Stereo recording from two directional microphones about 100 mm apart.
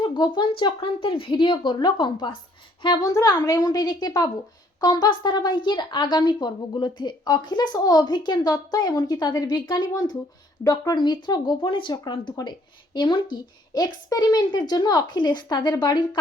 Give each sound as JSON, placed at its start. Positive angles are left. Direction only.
{"t": 0.0, "sound": "a woman's voice", "side_deg": 50}
{"t": 3.1, "sound": "a woman's voice", "side_deg": 35}
{"t": 13.7, "sound": "a woman's voice", "side_deg": 45}